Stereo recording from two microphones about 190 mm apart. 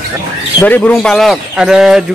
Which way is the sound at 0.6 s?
10° left (ahead or behind).